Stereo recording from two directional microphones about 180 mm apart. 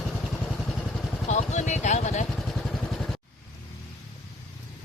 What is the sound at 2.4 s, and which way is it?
Vehicle, centre (ahead or behind).